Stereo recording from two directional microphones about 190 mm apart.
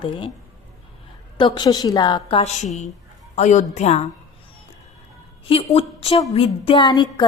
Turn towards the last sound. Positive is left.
turn(degrees=25)  # may be behind; listen again after turning